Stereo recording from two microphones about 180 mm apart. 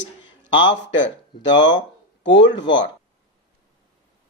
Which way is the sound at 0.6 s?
90° left.